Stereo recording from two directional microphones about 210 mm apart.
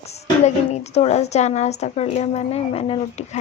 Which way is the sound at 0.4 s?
30° left (ahead or behind).